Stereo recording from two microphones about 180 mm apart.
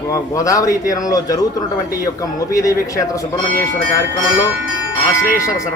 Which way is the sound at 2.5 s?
20° left (ahead or behind).